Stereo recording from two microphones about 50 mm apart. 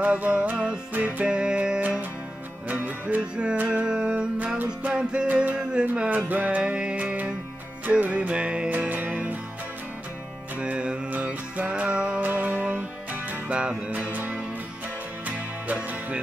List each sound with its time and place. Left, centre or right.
0.0 s music: right
0.9 s music: right
1.2 s music: centre
2.7 s music: right
3.2 s music: centre
6.0 s music: right
6.6 s music: right
10.6 s music: centre
11.1 s music: right
12.2 s music: right
13.5 s music: right